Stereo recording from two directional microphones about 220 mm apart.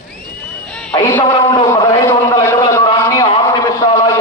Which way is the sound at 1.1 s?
15° left (ahead or behind).